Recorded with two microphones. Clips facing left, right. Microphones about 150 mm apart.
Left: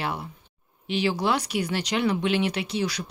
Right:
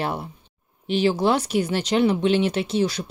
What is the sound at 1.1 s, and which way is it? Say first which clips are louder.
Speech: right 5 dB; 25° right (ahead or behind).